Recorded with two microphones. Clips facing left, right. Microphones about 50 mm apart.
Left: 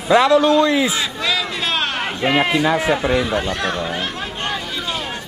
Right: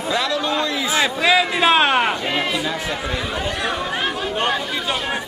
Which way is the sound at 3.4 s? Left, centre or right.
Centre.